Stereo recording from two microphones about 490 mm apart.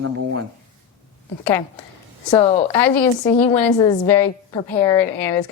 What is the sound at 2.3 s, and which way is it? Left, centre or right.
A woman's voice, centre.